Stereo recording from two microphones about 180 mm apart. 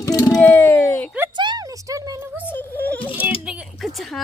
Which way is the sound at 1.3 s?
25° right (ahead or behind).